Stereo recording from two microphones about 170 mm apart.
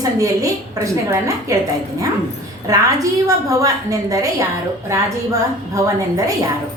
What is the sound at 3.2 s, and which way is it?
A woman's voice, 20° right (ahead or behind).